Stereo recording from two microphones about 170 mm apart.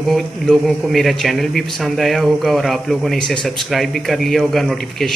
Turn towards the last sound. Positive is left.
turn(degrees=0)  # may be behind; listen again after turning